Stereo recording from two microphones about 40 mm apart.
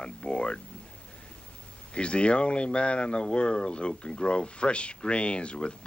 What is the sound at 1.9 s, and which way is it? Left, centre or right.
Speech, left.